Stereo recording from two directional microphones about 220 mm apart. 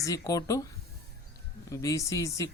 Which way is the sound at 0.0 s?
15° left (ahead or behind).